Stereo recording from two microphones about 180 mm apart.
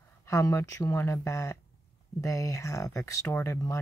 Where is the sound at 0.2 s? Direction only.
15° left (ahead or behind).